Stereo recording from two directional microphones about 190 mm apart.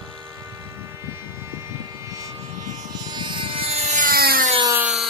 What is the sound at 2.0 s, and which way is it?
Vehicle, 15° right (ahead or behind).